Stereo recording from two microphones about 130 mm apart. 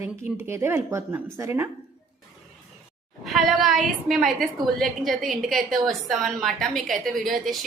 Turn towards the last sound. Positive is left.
turn(degrees=0)  # may be behind; listen again after turning